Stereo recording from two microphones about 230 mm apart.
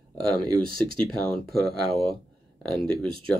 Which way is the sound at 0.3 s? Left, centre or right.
Right.